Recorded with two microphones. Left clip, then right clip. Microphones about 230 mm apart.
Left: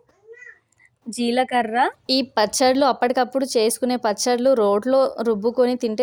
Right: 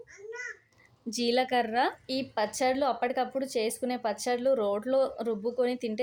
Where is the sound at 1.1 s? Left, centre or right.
Left.